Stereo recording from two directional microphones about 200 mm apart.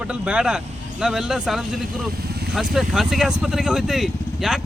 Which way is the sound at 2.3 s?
55° right (ahead or behind).